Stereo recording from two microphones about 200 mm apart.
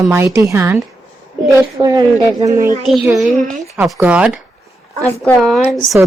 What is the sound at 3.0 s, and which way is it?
A woman's voice, centre (ahead or behind).